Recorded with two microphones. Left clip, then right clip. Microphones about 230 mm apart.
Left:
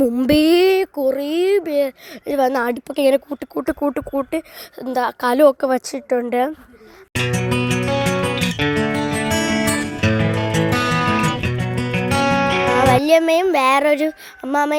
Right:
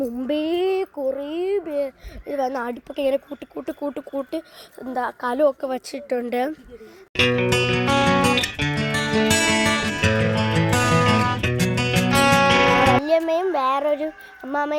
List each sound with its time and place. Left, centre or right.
0.0 s speech: left
4.4 s child singing: left
5.9 s speech: centre
7.1 s music: centre
13.0 s child singing: left